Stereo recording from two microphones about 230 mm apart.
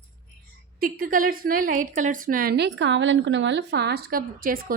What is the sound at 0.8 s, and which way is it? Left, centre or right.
A woman's voice, right.